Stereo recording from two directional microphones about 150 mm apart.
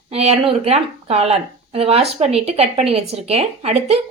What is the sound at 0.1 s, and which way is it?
Speech, 45° right (ahead or behind).